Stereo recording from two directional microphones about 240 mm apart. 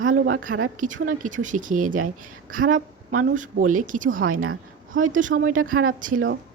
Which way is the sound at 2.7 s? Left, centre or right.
Right.